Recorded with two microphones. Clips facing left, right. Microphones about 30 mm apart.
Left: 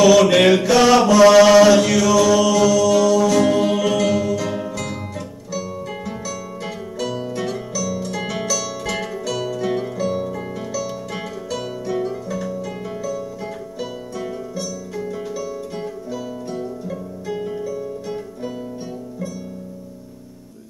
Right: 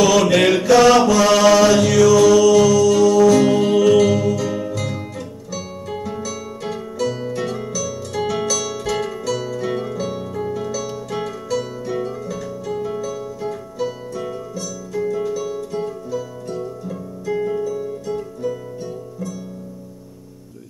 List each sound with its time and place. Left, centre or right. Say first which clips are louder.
0.0 s mantra: left 2 dB; centre
2.3 s music: right 3 dB; centre
6.2 s music: right 1 dB; centre
7.2 s harp: right 1 dB; centre
9.0 s music: right 1 dB; centre
10.4 s harp: right 2 dB; centre
12.8 s music: right 1 dB; centre
15.7 s music: right 3 dB; left
17.4 s music: right 5 dB; centre